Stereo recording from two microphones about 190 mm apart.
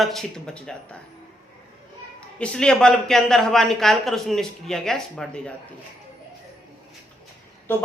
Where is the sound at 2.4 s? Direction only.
5° left (ahead or behind).